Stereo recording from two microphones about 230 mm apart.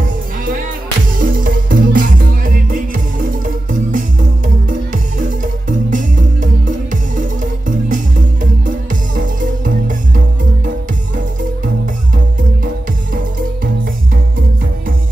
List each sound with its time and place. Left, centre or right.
1.1 s music: right